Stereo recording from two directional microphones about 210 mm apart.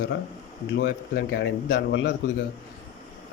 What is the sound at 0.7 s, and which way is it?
Speech, 55° left (ahead or behind).